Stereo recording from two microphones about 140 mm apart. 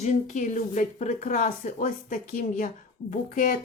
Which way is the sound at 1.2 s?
65° left (ahead or behind).